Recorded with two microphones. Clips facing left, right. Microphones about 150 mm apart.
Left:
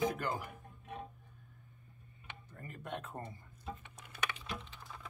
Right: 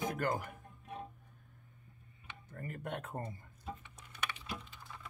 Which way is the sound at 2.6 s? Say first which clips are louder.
Right 2 dB; 55° right (ahead or behind).